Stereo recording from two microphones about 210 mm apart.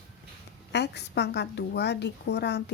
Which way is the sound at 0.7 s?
55° left (ahead or behind).